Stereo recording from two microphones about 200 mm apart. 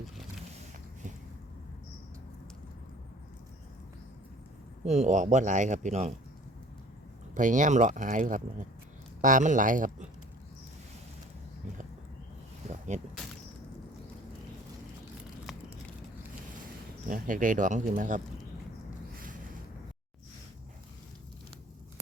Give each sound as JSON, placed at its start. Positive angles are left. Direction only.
{"t": 4.9, "sound": "speech", "side_deg": -35}
{"t": 7.3, "sound": "speech", "side_deg": -40}
{"t": 12.6, "sound": "a sound", "side_deg": -35}
{"t": 17.1, "sound": "speech", "side_deg": -40}